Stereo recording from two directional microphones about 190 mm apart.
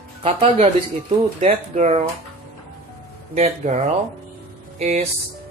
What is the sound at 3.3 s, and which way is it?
Speech, 35° right (ahead or behind).